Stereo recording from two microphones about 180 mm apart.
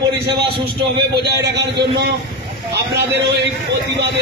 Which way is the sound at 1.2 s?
65° right (ahead or behind).